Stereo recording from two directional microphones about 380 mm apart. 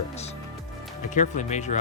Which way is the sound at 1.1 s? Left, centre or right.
Centre.